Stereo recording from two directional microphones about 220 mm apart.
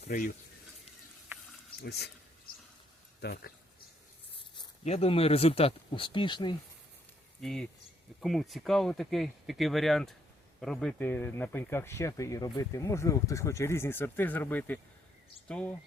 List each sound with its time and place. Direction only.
0.1 s speech: 40° left (ahead or behind)
1.8 s speech: 45° left (ahead or behind)
3.2 s a man's voice: 45° left (ahead or behind)
4.5 s speech: 30° left (ahead or behind)
7.4 s speech: 5° left (ahead or behind)